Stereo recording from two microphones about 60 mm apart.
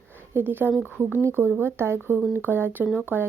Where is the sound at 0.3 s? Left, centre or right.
Right.